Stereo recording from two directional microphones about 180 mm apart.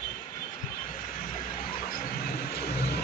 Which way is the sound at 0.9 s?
50° left (ahead or behind).